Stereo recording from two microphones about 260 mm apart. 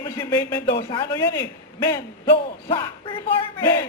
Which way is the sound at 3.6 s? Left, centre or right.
Centre.